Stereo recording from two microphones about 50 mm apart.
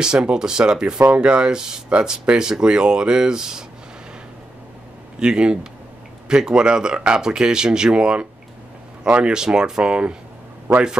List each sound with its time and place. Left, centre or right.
0.0 s speech: centre
0.9 s speech: right
1.2 s speech: centre
5.2 s speech: centre